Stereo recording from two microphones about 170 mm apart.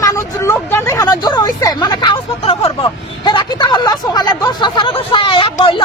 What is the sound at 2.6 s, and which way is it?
Vehicle, 30° left (ahead or behind).